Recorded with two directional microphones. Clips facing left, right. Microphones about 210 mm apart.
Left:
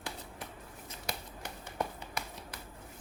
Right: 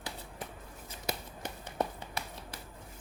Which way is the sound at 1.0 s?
20° right (ahead or behind).